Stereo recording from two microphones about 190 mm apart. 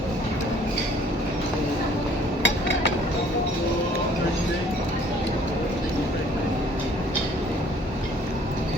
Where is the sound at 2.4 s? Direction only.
70° left (ahead or behind).